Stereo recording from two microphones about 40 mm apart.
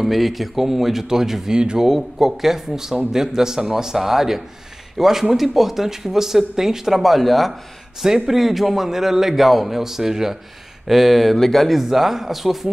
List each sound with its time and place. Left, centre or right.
0.0 s speech: centre
1.6 s speech: right
1.9 s speech: centre
11.8 s speech: centre